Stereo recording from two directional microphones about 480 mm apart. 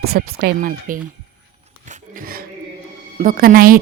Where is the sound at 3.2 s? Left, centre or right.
Centre.